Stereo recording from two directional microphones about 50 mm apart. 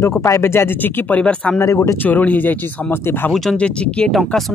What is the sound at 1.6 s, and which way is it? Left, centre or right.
Speech, left.